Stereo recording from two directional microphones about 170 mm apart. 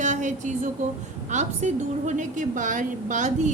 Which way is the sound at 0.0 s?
45° right (ahead or behind).